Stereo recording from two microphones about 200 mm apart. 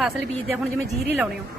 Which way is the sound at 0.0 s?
5° right (ahead or behind).